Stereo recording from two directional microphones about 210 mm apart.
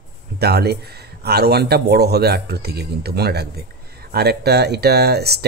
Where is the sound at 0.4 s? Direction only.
50° right (ahead or behind).